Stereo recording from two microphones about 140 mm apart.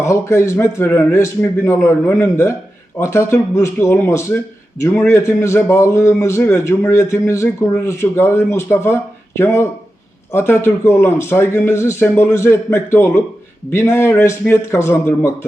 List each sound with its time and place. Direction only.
0.0 s a man's voice: 20° left (ahead or behind)